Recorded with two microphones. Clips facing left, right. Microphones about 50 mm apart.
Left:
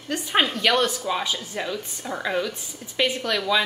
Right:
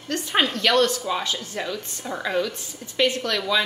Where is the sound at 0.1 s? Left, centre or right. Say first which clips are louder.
Even; centre.